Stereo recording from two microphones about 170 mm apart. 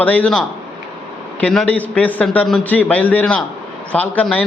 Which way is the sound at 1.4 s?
5° left (ahead or behind).